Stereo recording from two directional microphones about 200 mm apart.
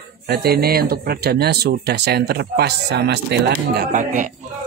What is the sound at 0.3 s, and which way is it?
Speech, 50° right (ahead or behind).